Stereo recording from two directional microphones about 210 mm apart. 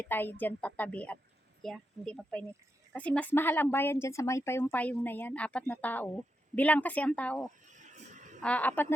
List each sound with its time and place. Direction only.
0.0 s a woman's voice: 10° left (ahead or behind)
7.7 s a sound: 35° right (ahead or behind)
8.4 s speech: 5° left (ahead or behind)